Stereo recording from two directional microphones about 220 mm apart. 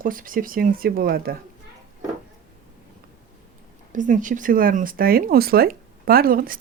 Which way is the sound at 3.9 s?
35° right (ahead or behind).